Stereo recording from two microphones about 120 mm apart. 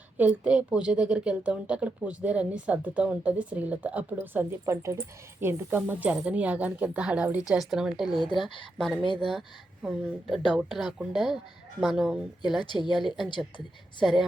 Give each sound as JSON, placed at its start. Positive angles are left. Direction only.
{"t": 0.2, "sound": "a woman's voice", "side_deg": -10}
{"t": 12.6, "sound": "a woman's voice", "side_deg": 40}
{"t": 13.0, "sound": "a woman's voice", "side_deg": 0}